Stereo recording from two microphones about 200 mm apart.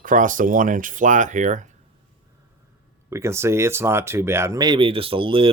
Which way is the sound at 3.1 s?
15° right (ahead or behind).